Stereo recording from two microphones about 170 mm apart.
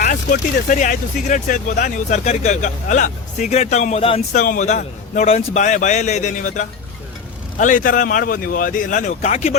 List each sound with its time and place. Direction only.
0.0 s speech: 55° left (ahead or behind); by 4.2 s 35° left (ahead or behind)
4.4 s speech: 50° left (ahead or behind)